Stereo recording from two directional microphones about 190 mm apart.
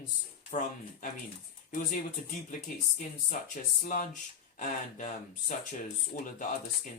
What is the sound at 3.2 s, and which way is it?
Speech, 45° left (ahead or behind).